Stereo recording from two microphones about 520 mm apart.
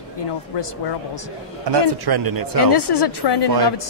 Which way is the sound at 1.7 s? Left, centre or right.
Right.